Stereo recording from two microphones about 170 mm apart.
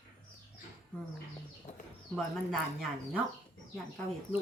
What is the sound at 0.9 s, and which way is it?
Bird, 10° left (ahead or behind).